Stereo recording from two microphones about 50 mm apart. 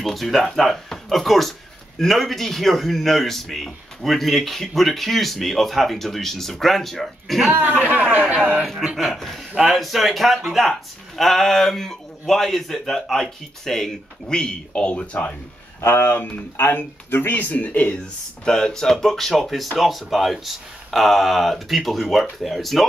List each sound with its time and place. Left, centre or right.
0.0 s speech: centre
8.2 s speech: right
8.6 s speech: centre; by 15.2 s left
16.0 s speech: left
18.4 s speech: centre